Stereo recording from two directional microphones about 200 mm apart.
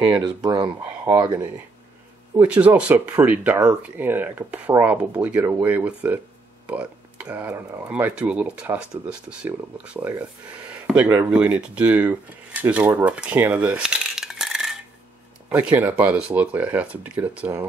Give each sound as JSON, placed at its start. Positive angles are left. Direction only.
{"t": 0.0, "sound": "speech", "side_deg": -20}